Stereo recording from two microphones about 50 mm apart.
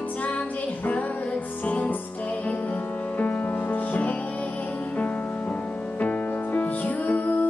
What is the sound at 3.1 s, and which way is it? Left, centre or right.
Music, left.